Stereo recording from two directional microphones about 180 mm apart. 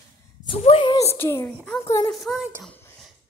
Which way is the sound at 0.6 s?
30° left (ahead or behind).